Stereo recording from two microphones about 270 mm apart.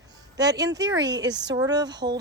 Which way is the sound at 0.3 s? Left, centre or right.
Centre.